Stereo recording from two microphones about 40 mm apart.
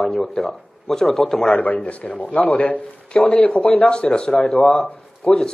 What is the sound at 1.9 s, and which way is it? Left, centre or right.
Speech, left.